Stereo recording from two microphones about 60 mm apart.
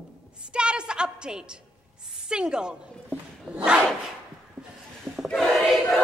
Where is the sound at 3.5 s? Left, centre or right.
Centre.